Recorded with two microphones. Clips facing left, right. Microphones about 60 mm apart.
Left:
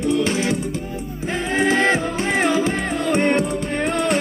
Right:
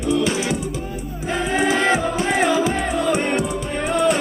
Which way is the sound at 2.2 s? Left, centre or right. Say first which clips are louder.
Right 1 dB; left.